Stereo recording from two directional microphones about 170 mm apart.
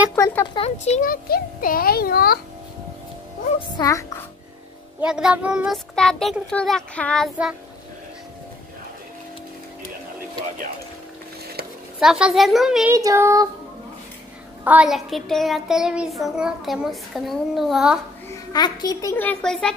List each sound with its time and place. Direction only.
0.1 s speech: 10° left (ahead or behind)
0.6 s speech: 40° left (ahead or behind)
1.0 s a child's voice: 55° left (ahead or behind)
3.7 s a child's voice: 20° left (ahead or behind)
5.0 s child singing: 5° right (ahead or behind)
12.0 s child singing: centre (ahead or behind)
12.9 s a sound: 20° right (ahead or behind)
14.6 s child singing: 10° right (ahead or behind)
18.3 s a child's voice: 20° left (ahead or behind); by 19.7 s 5° left (ahead or behind)